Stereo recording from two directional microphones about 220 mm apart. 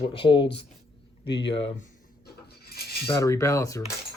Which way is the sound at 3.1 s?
15° left (ahead or behind).